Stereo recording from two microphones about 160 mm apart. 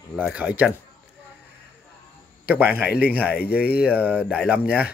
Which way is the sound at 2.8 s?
75° left (ahead or behind).